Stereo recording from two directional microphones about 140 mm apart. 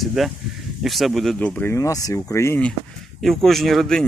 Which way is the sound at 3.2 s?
Centre (ahead or behind).